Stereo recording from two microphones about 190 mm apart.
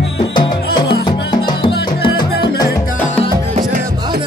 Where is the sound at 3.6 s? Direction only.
45° right (ahead or behind).